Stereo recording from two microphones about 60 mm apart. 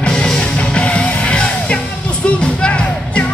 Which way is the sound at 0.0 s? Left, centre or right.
Centre.